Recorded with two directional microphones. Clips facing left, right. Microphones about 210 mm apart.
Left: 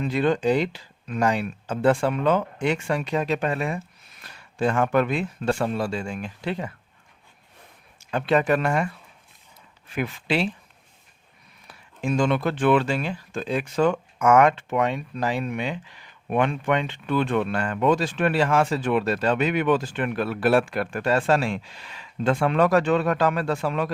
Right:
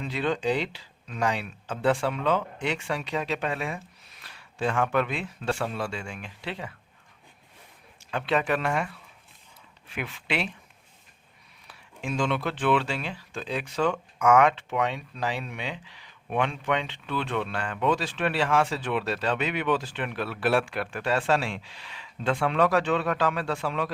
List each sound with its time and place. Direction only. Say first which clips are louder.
0.0 s speech: left 6 dB; 50° left (ahead or behind)
8.1 s speech: left 5 dB; 45° left (ahead or behind)
9.9 s speech: left 6 dB; 40° left (ahead or behind)
11.7 s speech: left 7 dB; 45° left (ahead or behind)